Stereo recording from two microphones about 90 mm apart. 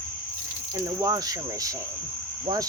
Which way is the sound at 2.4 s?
45° right (ahead or behind).